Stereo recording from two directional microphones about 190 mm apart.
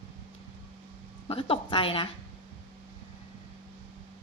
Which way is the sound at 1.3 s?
30° left (ahead or behind).